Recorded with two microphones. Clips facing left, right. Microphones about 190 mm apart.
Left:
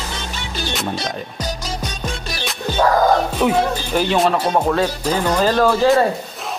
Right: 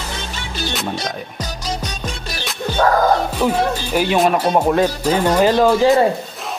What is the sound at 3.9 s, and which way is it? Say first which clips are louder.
Speech: right 1 dB; 10° right (ahead or behind).